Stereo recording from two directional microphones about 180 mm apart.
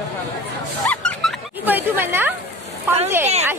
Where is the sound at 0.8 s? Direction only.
5° left (ahead or behind).